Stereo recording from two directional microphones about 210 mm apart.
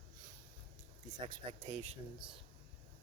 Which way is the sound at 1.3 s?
30° right (ahead or behind).